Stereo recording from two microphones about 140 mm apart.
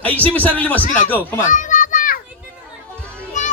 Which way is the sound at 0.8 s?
65° left (ahead or behind).